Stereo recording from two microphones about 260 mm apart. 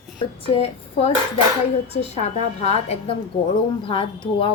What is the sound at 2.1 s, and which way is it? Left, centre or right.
A woman's voice, left.